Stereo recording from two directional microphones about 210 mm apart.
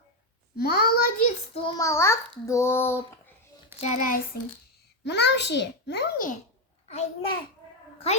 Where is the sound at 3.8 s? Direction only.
35° left (ahead or behind).